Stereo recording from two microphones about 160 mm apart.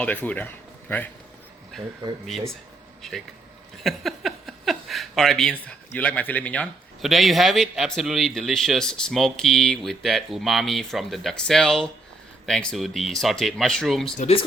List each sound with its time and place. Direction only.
0.0 s speech: 10° left (ahead or behind)
3.0 s speech: centre (ahead or behind)
14.2 s speech: 40° left (ahead or behind)